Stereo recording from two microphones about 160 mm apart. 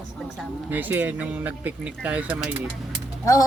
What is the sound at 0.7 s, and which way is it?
Speech, 10° right (ahead or behind).